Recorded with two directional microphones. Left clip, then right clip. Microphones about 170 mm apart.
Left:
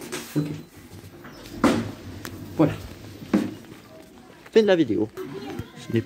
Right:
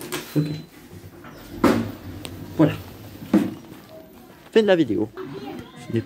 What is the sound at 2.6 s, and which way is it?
Speech, 5° left (ahead or behind).